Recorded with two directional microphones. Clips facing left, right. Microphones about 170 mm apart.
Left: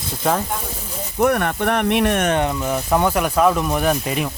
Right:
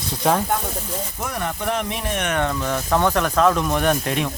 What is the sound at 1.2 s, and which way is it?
Speech, 60° left (ahead or behind).